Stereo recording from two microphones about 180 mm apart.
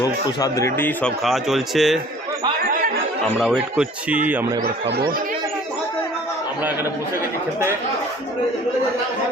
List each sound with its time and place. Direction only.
0.0 s a man's voice: 20° left (ahead or behind)
1.2 s speech: centre (ahead or behind)
3.3 s a man's voice: centre (ahead or behind)
4.6 s speech: 65° right (ahead or behind)